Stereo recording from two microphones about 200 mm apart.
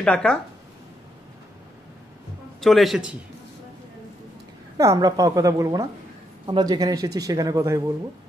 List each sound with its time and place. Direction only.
0.0 s a man's voice: 5° left (ahead or behind)
2.6 s a man's voice: centre (ahead or behind)
4.7 s a man's voice: 15° right (ahead or behind)